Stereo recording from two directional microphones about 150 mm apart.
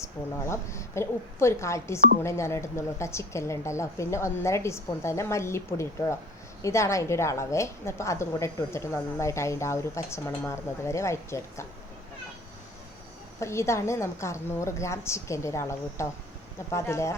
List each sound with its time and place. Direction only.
0.4 s a woman's voice: 20° left (ahead or behind)
13.4 s a woman's voice: 20° left (ahead or behind)